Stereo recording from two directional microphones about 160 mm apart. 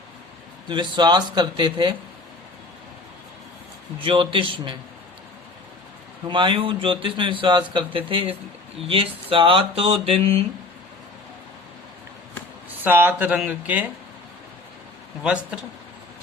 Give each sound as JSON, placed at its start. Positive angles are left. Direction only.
{"t": 0.7, "sound": "speech", "side_deg": -30}
{"t": 4.0, "sound": "speech", "side_deg": -35}
{"t": 6.2, "sound": "speech", "side_deg": -30}
{"t": 12.8, "sound": "speech", "side_deg": -10}
{"t": 15.2, "sound": "speech", "side_deg": -5}